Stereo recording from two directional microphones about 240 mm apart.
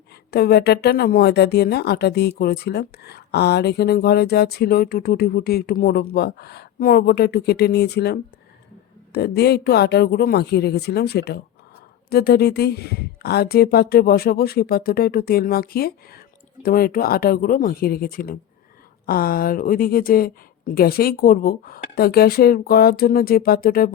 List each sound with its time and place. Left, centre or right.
0.3 s speech: left